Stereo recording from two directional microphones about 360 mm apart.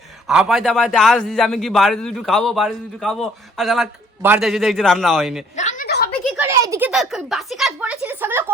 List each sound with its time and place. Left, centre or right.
0.3 s a man's voice: centre
5.5 s a sound: left
6.3 s a man's voice: centre